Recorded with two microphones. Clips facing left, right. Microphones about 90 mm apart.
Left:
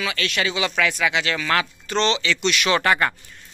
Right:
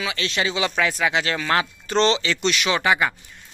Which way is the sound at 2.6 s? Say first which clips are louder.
Left 2 dB; 10° right (ahead or behind).